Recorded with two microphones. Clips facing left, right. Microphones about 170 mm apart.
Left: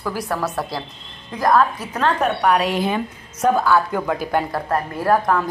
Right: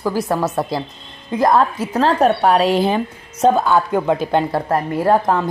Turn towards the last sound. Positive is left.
turn(degrees=-25)  # may be behind; listen again after turning